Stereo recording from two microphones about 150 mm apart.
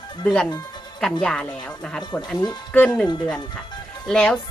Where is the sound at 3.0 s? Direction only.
30° left (ahead or behind).